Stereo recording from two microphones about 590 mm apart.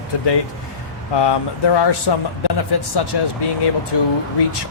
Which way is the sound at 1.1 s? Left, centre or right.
Left.